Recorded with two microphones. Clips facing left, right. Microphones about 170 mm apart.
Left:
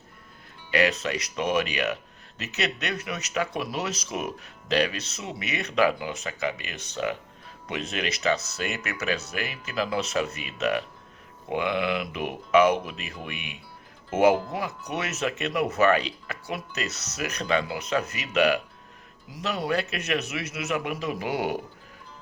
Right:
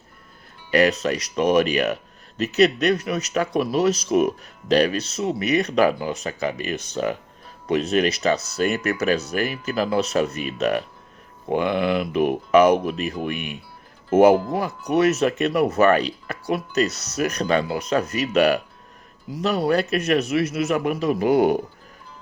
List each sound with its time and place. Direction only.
0.7 s speech: 40° right (ahead or behind)